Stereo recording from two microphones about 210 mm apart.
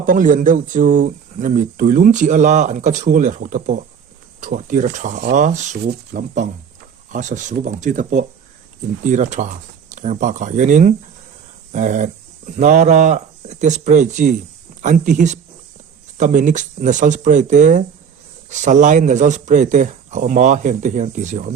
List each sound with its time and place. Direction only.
0.0 s speech: 40° right (ahead or behind)